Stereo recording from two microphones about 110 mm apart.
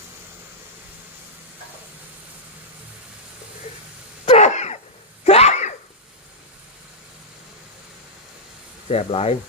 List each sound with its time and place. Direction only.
4.3 s cough: 90° left
5.2 s sneeze: 70° left (ahead or behind); by 5.7 s 90° left
8.9 s speech: 70° left (ahead or behind)